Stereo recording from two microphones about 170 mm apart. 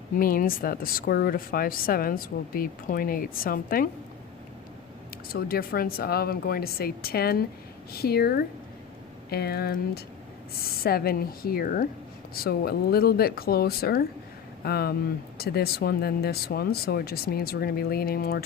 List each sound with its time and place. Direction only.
0.2 s speech: 55° left (ahead or behind)
5.3 s speech: 60° left (ahead or behind)